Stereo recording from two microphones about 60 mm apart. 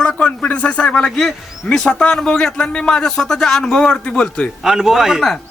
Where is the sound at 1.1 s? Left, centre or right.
Centre.